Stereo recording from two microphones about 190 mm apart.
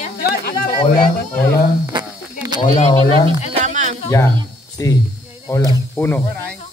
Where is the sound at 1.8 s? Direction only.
20° right (ahead or behind).